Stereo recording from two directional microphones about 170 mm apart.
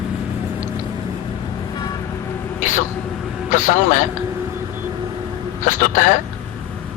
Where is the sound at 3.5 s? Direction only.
50° left (ahead or behind).